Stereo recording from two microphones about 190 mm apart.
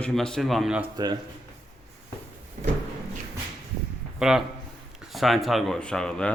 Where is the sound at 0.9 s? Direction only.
20° right (ahead or behind).